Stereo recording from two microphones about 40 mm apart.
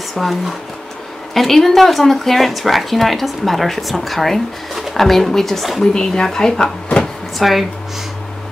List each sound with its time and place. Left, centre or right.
0.1 s speech: centre
5.9 s speech: centre
7.3 s speech: centre